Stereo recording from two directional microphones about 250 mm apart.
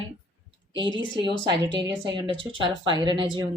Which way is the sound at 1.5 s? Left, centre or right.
Centre.